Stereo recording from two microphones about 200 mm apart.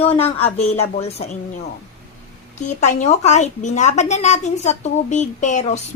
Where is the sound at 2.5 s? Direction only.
35° left (ahead or behind).